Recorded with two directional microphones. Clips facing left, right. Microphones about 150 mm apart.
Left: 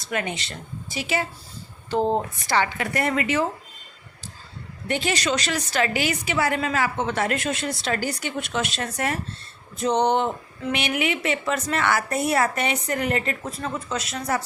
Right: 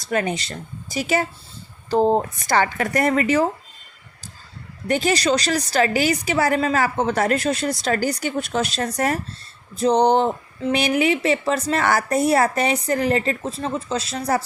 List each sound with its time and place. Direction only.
0.0 s a woman's voice: 40° right (ahead or behind)
4.9 s a woman's voice: 40° right (ahead or behind)